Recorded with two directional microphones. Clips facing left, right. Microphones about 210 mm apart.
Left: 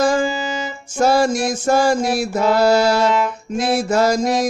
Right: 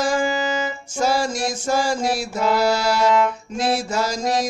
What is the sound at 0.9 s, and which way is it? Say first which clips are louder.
Music: left 6 dB; 55° left (ahead or behind).